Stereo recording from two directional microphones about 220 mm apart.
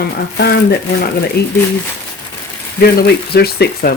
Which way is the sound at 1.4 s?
45° left (ahead or behind).